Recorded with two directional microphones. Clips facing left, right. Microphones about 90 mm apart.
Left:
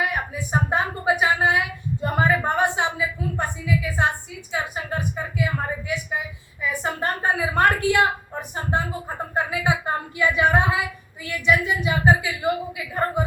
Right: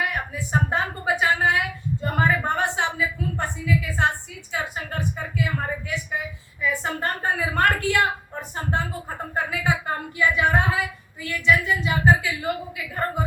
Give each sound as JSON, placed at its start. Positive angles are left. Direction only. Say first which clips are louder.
{"t": 0.0, "sound": "a woman's voice", "louder": "left 2 dB", "side_deg": 20}